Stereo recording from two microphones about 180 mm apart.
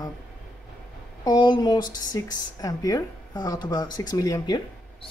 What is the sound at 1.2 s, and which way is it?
Speech, 25° left (ahead or behind).